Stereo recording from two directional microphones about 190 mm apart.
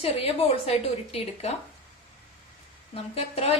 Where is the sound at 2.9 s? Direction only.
35° left (ahead or behind).